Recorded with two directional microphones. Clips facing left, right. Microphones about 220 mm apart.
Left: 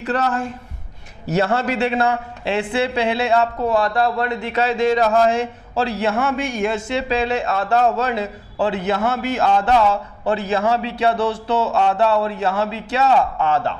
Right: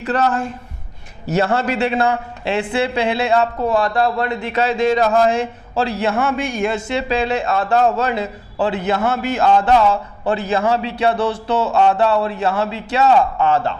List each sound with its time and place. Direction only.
0.0 s a man's voice: 20° right (ahead or behind)
11.2 s speech: 30° right (ahead or behind)